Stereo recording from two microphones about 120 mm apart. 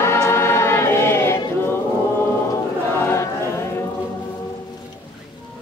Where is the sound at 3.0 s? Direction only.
20° left (ahead or behind).